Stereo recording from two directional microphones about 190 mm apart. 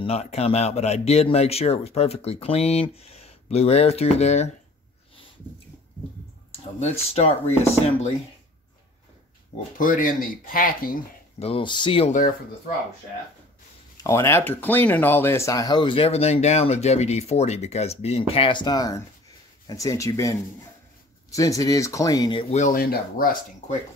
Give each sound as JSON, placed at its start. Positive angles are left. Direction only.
{"t": 0.0, "sound": "speech", "side_deg": 35}
{"t": 6.5, "sound": "speech", "side_deg": 35}
{"t": 9.8, "sound": "speech", "side_deg": 45}
{"t": 11.3, "sound": "speech", "side_deg": 30}
{"t": 12.1, "sound": "speech", "side_deg": 45}
{"t": 13.9, "sound": "speech", "side_deg": 15}
{"t": 22.6, "sound": "speech", "side_deg": 45}